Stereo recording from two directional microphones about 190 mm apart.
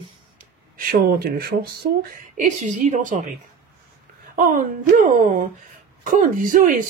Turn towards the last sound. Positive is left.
turn(degrees=-45)  # may be behind; listen again after turning